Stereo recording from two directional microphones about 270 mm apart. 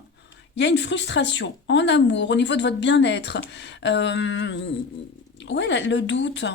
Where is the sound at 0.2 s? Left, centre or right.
Left.